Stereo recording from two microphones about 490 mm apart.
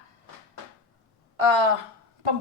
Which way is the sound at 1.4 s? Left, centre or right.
Right.